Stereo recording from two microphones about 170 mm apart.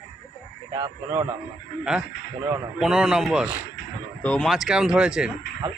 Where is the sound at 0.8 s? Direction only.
20° right (ahead or behind).